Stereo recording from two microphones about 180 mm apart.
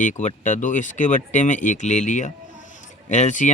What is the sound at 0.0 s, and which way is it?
Speech, 45° left (ahead or behind).